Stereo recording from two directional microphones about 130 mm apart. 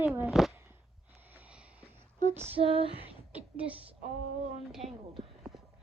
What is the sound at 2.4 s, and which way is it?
Female singing, 50° right (ahead or behind).